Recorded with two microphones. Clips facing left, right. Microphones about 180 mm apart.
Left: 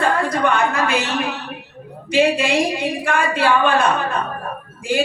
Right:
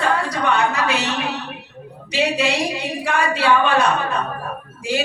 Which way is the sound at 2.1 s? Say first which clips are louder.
Left 4 dB; 50° left (ahead or behind).